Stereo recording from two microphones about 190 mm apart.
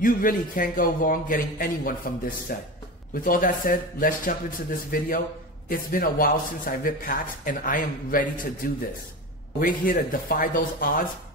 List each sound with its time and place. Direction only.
0.0 s a man's voice: 45° left (ahead or behind)